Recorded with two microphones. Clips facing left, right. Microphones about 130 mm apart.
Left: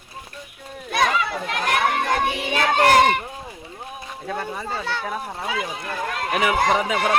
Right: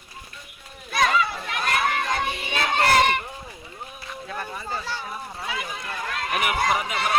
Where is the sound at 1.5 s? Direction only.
60° left (ahead or behind).